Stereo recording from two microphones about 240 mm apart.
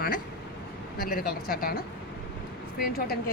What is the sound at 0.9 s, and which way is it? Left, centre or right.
A woman's voice, left.